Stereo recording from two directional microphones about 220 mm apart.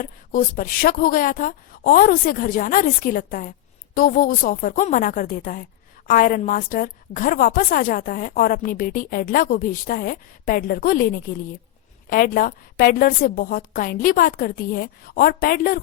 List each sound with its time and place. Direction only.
0.0 s a woman's voice: 40° left (ahead or behind)